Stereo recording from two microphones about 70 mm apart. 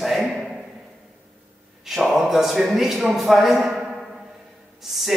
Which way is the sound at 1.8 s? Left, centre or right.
Centre.